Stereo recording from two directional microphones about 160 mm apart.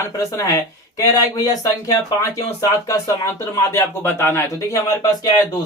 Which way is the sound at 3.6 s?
15° left (ahead or behind).